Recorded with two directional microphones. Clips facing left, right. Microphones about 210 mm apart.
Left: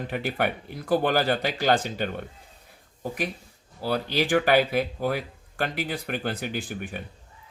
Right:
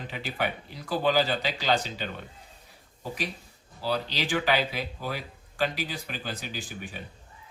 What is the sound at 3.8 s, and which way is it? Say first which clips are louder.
Speech: left 4 dB; 55° left (ahead or behind).